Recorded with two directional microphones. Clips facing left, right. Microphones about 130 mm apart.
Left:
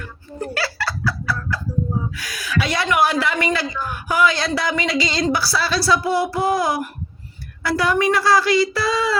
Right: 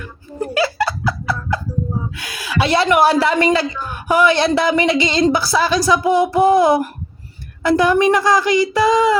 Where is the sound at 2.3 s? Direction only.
30° right (ahead or behind).